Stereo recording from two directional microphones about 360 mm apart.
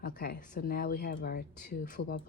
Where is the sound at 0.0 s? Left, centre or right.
Left.